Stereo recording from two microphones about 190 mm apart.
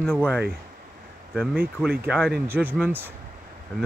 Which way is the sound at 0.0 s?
5° left (ahead or behind).